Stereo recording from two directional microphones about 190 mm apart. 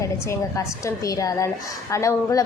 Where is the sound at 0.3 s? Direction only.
15° left (ahead or behind).